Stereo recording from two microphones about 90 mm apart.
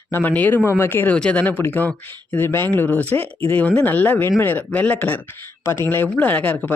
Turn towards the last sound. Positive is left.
turn(degrees=20)  # may be behind; listen again after turning